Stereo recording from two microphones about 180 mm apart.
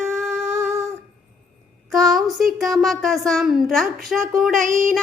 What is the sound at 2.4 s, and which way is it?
Child singing, centre (ahead or behind).